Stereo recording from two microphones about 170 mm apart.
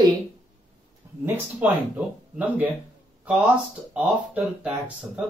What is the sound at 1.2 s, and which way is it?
Speech, 10° right (ahead or behind).